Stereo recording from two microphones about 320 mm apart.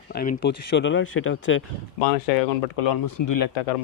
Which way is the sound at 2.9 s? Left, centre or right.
Left.